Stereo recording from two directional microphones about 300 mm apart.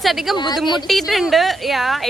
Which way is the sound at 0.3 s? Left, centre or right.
Centre.